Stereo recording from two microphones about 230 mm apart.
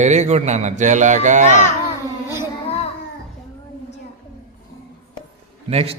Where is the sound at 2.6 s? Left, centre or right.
Left.